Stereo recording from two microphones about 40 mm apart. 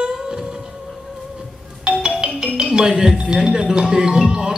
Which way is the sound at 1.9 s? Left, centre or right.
Centre.